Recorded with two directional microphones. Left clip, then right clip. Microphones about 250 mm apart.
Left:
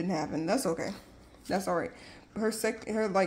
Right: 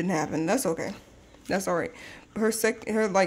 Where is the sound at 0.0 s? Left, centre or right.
Right.